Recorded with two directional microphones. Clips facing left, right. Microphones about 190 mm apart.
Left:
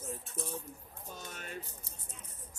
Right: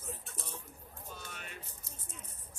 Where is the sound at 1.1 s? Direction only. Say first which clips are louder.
Left 4 dB; 40° left (ahead or behind).